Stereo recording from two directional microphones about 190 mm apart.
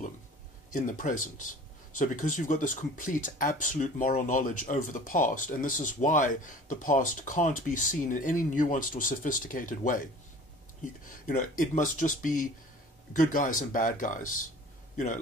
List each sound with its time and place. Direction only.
0.7 s speech: 45° left (ahead or behind)
11.1 s speech: 45° left (ahead or behind)